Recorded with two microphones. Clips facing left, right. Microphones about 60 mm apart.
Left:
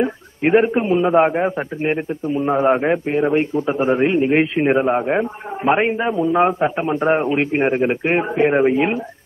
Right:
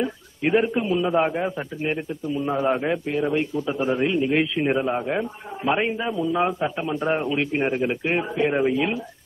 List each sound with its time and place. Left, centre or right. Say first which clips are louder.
0.0 s a man's voice: left 6 dB; left